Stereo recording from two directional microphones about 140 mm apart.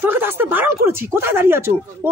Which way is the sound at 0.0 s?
15° right (ahead or behind).